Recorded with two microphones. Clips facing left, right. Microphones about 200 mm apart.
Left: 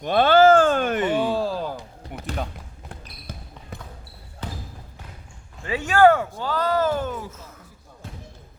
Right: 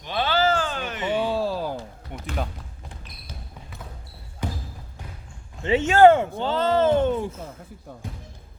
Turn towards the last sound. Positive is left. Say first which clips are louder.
# right 4 dB
turn(degrees=-30)  # may be behind; listen again after turning